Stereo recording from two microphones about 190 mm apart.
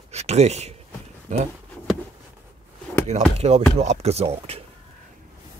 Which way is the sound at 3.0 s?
35° right (ahead or behind).